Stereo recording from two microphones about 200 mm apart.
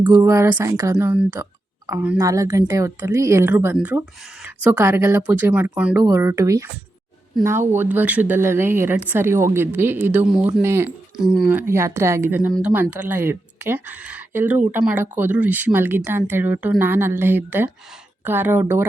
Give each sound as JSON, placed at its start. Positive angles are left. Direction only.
{"t": 0.0, "sound": "speech", "side_deg": -15}